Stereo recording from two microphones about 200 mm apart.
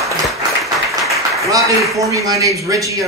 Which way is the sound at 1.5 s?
15° right (ahead or behind).